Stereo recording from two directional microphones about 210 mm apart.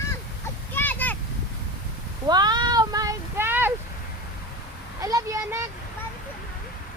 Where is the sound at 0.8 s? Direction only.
10° left (ahead or behind).